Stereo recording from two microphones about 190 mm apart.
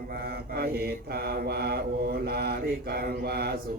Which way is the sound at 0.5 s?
55° right (ahead or behind).